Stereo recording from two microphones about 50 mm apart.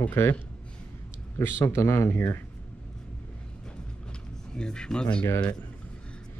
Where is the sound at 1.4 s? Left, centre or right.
Left.